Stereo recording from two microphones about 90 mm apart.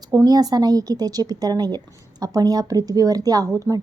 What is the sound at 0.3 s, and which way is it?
A woman's voice, 45° right (ahead or behind).